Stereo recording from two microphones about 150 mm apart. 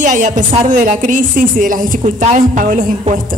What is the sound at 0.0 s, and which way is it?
A woman's voice, 55° right (ahead or behind).